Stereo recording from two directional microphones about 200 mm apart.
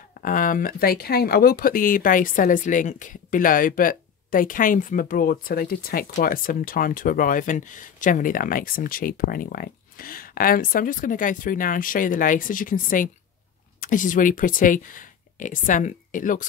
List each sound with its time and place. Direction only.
0.2 s speech: 45° left (ahead or behind)